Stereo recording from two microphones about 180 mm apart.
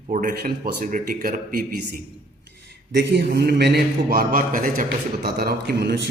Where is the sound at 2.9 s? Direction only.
70° right (ahead or behind).